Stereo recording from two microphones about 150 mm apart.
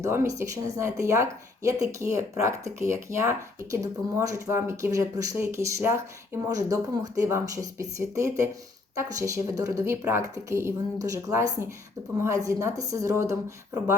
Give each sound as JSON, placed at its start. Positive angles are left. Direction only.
{"t": 0.0, "sound": "speech", "side_deg": -20}